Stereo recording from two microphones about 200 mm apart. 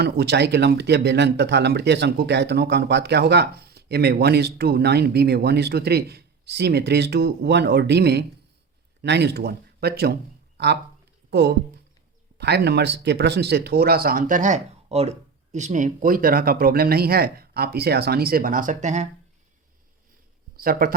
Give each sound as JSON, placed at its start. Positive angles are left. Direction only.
{"t": 0.0, "sound": "speech", "side_deg": -55}
{"t": 20.6, "sound": "speech", "side_deg": -45}